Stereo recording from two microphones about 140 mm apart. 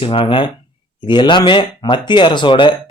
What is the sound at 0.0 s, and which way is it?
Speech, 40° left (ahead or behind).